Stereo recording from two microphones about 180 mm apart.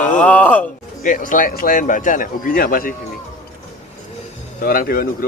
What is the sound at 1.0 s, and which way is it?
Speech, 45° left (ahead or behind).